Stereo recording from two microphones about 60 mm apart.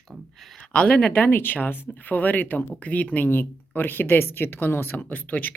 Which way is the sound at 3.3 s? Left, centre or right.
Left.